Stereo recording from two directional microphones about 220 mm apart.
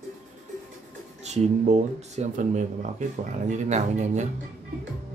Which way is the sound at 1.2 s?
30° right (ahead or behind).